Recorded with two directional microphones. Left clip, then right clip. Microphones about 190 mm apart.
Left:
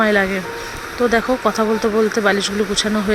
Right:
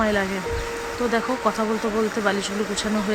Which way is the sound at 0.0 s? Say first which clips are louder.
Left 6 dB; 25° left (ahead or behind).